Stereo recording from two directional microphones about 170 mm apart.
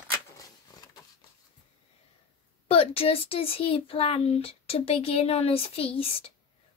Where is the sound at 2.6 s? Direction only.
35° left (ahead or behind).